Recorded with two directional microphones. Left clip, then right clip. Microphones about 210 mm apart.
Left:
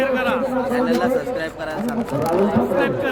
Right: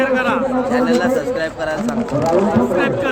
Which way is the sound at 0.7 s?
15° right (ahead or behind).